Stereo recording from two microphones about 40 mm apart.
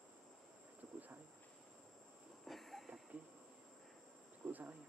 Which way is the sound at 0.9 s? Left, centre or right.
Right.